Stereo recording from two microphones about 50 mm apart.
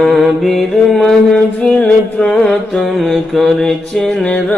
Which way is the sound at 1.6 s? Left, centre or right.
Left.